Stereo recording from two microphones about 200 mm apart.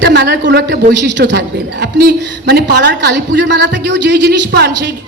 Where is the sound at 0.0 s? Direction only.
55° right (ahead or behind).